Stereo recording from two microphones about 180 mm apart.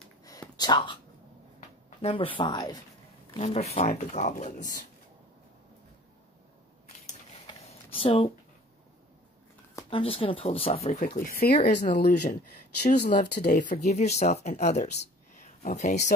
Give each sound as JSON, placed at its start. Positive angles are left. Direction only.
{"t": 0.2, "sound": "a sound", "side_deg": 20}
{"t": 2.0, "sound": "speech", "side_deg": 30}
{"t": 3.3, "sound": "speech", "side_deg": 35}
{"t": 7.4, "sound": "a sound", "side_deg": 30}
{"t": 9.8, "sound": "speech", "side_deg": 30}
{"t": 11.1, "sound": "speech", "side_deg": 55}
{"t": 12.1, "sound": "speech", "side_deg": 45}